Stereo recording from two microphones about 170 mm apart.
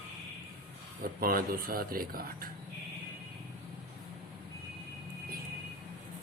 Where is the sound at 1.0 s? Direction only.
60° right (ahead or behind).